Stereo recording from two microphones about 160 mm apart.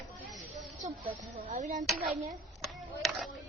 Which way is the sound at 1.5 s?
45° right (ahead or behind).